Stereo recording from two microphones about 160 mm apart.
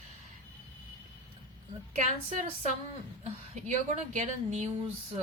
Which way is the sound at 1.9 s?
50° right (ahead or behind).